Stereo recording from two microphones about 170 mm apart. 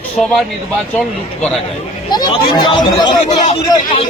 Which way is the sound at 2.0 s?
25° left (ahead or behind).